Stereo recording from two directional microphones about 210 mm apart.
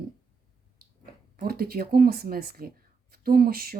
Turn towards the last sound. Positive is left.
turn(degrees=-45)  # may be behind; listen again after turning